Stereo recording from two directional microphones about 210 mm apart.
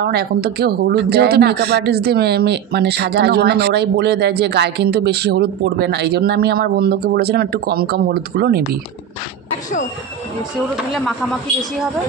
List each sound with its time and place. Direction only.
0.0 s speech: 50° right (ahead or behind)